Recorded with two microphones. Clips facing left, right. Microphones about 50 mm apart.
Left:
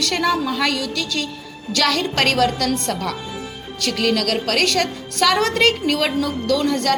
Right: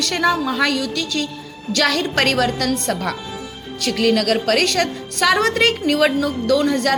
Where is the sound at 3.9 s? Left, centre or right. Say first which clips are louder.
Right 3 dB; centre.